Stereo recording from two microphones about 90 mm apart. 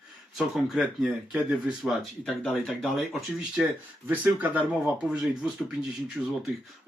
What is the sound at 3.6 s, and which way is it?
Speech, 15° right (ahead or behind).